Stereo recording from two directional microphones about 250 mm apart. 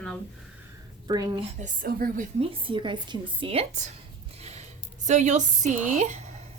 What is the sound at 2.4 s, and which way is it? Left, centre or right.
A woman's voice, right.